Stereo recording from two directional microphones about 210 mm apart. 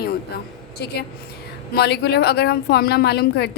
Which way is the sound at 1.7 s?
50° left (ahead or behind).